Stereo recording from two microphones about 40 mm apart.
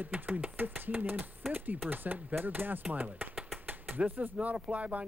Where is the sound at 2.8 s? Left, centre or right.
Right.